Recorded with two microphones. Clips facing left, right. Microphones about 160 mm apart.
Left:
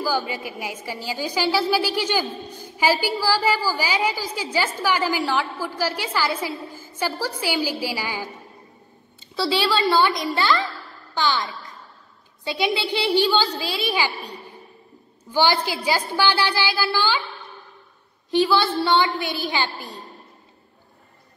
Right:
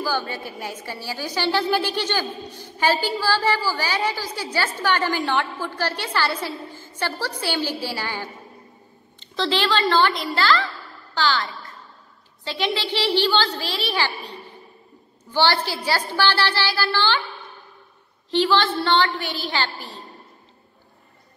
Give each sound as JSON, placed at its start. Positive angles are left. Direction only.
{"t": 0.0, "sound": "a woman's voice", "side_deg": 10}
{"t": 15.3, "sound": "a woman's voice", "side_deg": 10}
{"t": 18.3, "sound": "a woman's voice", "side_deg": 10}